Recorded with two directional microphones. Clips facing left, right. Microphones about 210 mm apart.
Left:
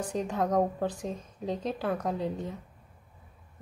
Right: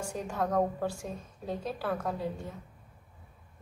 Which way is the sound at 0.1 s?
20° left (ahead or behind).